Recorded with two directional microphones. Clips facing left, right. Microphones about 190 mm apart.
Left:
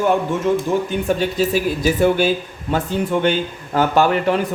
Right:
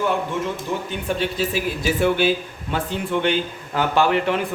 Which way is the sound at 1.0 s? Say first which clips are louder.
Left 1 dB; 40° left (ahead or behind).